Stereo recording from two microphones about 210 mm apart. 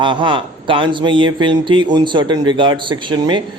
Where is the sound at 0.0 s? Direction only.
20° right (ahead or behind).